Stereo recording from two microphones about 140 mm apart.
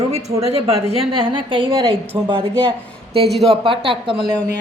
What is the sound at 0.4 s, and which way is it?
A woman's voice, 45° right (ahead or behind).